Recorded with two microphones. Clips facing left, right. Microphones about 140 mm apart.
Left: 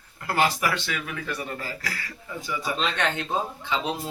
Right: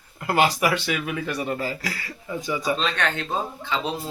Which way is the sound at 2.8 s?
15° left (ahead or behind).